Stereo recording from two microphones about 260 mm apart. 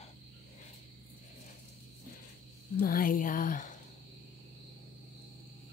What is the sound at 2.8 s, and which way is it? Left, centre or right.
Speech, left.